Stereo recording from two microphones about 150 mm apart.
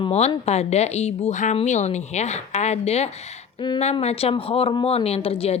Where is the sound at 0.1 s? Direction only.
45° left (ahead or behind).